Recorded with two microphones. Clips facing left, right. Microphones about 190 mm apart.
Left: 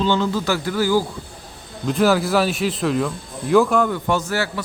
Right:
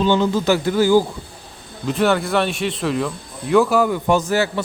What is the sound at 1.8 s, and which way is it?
Speech, centre (ahead or behind).